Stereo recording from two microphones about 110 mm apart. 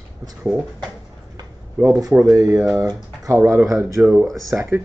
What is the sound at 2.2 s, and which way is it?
Speech, 25° right (ahead or behind).